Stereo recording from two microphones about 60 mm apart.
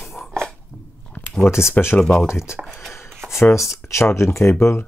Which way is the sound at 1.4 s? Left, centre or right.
Left.